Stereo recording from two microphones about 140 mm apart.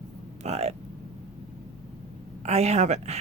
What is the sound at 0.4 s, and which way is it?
Speech, 50° right (ahead or behind).